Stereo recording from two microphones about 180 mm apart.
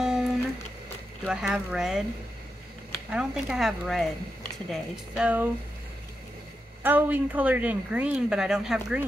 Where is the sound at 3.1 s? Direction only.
5° right (ahead or behind).